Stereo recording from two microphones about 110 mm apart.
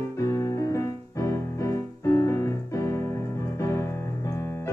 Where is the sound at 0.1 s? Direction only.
30° left (ahead or behind).